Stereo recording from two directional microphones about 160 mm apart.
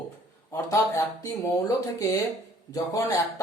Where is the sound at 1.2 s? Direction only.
20° left (ahead or behind).